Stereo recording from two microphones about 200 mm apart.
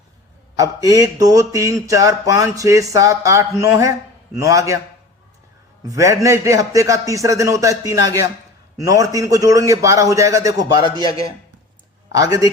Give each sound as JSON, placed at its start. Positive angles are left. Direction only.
{"t": 0.6, "sound": "speech", "side_deg": -20}
{"t": 5.9, "sound": "speech", "side_deg": -15}
{"t": 12.1, "sound": "speech", "side_deg": -15}